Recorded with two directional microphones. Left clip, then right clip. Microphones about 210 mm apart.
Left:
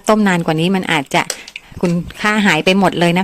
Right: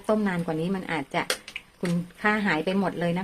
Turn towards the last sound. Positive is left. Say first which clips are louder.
# left 14 dB
turn(degrees=45)  # may be behind; listen again after turning